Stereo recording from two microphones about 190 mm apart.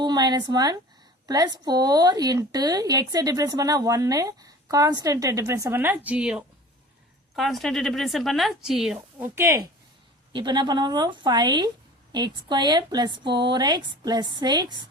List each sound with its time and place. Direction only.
0.0 s a woman's voice: 20° right (ahead or behind)